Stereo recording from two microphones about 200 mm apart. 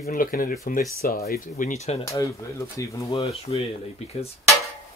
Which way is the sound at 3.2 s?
30° left (ahead or behind).